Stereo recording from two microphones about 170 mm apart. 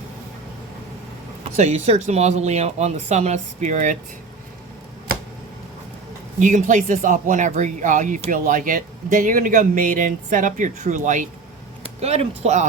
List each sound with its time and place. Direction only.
1.5 s speech: 40° right (ahead or behind)
6.4 s speech: 45° right (ahead or behind)